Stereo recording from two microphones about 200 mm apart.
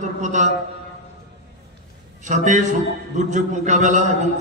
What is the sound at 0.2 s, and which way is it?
Speech, 40° right (ahead or behind).